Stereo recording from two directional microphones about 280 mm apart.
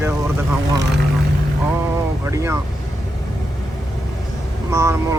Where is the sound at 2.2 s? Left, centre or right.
Centre.